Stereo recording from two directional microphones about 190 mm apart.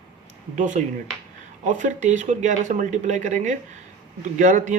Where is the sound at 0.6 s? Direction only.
40° right (ahead or behind).